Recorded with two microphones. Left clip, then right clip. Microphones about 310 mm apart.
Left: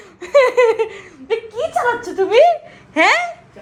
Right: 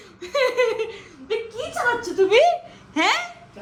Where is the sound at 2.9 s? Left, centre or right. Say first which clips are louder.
Left 7 dB; centre.